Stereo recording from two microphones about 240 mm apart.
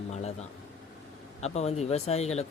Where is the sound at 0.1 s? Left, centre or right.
Left.